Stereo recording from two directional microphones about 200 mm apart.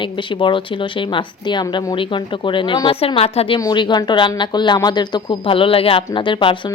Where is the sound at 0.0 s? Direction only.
25° left (ahead or behind).